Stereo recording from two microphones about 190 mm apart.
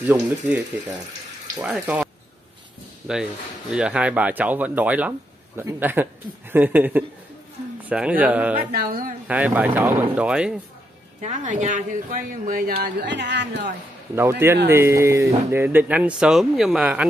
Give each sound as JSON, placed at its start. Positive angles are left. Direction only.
{"t": 0.0, "sound": "speech", "side_deg": -10}
{"t": 3.7, "sound": "speech", "side_deg": -5}
{"t": 8.7, "sound": "speech", "side_deg": -50}
{"t": 9.3, "sound": "speech", "side_deg": -5}
{"t": 11.1, "sound": "speech", "side_deg": -40}
{"t": 13.0, "sound": "speech", "side_deg": -65}
{"t": 14.7, "sound": "speech", "side_deg": -15}